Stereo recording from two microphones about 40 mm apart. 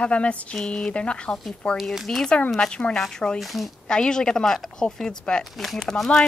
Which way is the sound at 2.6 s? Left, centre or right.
Left.